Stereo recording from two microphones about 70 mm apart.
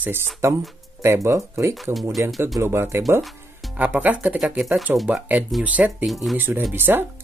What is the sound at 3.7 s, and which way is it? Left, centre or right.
Speech, right.